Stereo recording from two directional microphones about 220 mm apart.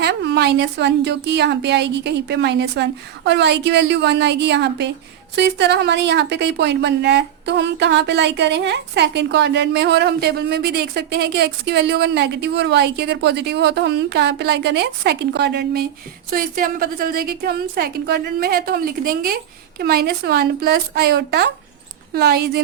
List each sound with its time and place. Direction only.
0.0 s a woman's voice: 50° right (ahead or behind)